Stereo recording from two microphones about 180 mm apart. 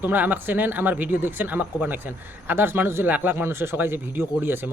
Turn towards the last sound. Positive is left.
turn(degrees=-10)  # may be behind; listen again after turning